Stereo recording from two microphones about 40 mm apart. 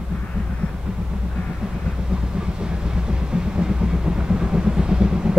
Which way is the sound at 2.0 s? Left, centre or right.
Centre.